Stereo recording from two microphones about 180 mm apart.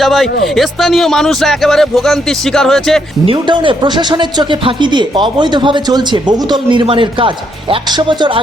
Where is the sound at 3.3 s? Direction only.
25° right (ahead or behind).